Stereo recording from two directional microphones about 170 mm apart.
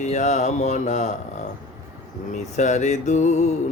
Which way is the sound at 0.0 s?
45° left (ahead or behind).